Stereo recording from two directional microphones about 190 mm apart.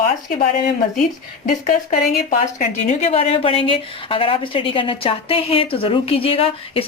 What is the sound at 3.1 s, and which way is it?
A woman's voice, 30° left (ahead or behind).